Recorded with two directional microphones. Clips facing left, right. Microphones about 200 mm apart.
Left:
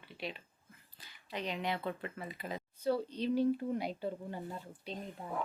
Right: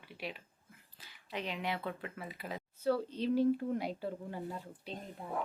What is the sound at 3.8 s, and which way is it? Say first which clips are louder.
Speech: even; 5° right (ahead or behind).